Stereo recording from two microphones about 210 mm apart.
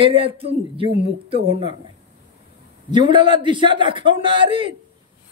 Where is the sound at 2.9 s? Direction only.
20° right (ahead or behind).